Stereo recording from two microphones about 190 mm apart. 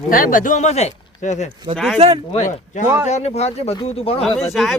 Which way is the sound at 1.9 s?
30° right (ahead or behind).